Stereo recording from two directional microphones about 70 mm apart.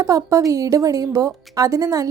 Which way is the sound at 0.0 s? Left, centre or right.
Right.